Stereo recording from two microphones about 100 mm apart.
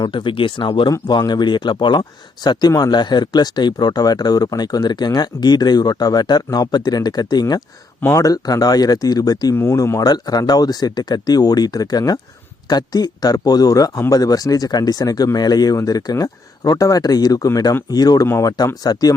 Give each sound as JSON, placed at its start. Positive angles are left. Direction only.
{"t": 0.0, "sound": "speech", "side_deg": 55}
{"t": 0.9, "sound": "speech", "side_deg": 40}